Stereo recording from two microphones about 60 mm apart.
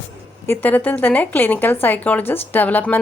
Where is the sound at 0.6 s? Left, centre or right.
Left.